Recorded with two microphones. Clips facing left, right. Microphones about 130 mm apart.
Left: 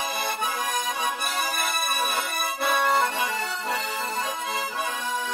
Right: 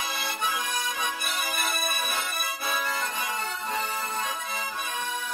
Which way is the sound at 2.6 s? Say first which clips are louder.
Left 9 dB; 70° left (ahead or behind).